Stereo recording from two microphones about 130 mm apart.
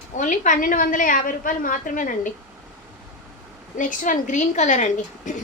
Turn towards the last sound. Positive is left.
turn(degrees=70)  # may be behind; listen again after turning